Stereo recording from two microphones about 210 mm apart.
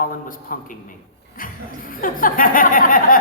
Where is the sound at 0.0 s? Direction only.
40° left (ahead or behind).